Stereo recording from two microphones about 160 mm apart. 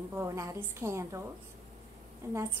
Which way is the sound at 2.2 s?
20° right (ahead or behind).